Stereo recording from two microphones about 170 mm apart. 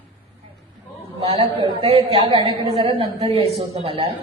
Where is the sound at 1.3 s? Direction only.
25° right (ahead or behind).